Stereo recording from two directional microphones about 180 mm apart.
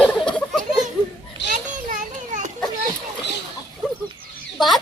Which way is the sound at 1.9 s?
45° right (ahead or behind).